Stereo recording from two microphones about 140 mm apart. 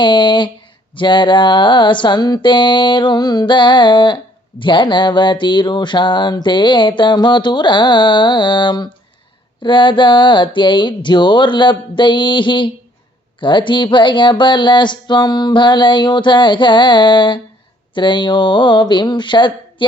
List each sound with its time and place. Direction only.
0.0 s music: 35° left (ahead or behind)